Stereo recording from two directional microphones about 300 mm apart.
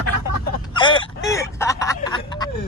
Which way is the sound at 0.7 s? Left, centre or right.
Centre.